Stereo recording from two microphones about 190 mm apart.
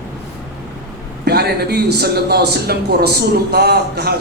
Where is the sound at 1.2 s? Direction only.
55° right (ahead or behind).